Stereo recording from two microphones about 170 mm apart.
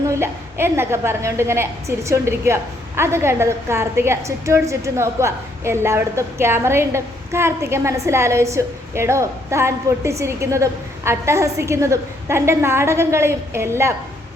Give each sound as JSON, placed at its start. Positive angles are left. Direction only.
{"t": 0.1, "sound": "a woman's voice", "side_deg": -15}